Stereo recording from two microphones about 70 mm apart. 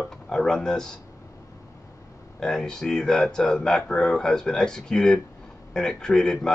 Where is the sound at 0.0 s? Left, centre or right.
Centre.